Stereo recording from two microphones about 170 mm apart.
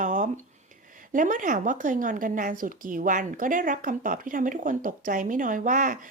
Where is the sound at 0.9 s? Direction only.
50° right (ahead or behind).